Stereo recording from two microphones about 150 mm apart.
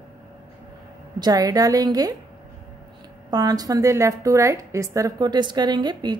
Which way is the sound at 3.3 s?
25° right (ahead or behind).